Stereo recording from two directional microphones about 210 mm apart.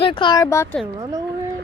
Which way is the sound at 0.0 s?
25° left (ahead or behind).